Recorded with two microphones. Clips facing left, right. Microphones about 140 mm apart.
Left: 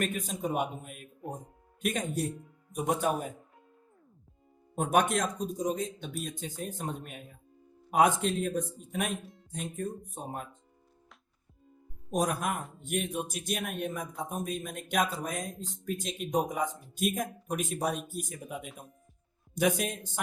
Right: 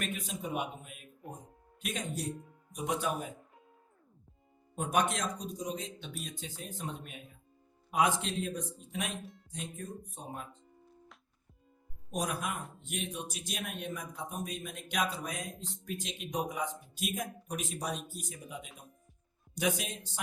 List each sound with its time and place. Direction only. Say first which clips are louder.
0.0 s speech: left 6 dB; 45° left (ahead or behind)
1.2 s speech: left 7 dB; centre (ahead or behind)
1.8 s speech: left 6 dB; 50° left (ahead or behind)
4.7 s speech: left 4 dB; 50° left (ahead or behind)
12.1 s speech: left 6 dB; 45° left (ahead or behind)